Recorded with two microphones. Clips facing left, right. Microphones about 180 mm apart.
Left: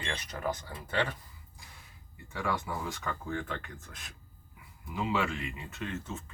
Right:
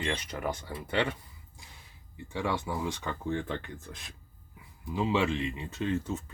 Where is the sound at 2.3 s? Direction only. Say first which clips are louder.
Right 2 dB; 25° right (ahead or behind).